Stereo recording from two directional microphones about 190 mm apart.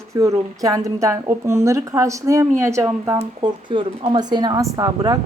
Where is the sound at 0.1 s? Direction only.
15° right (ahead or behind).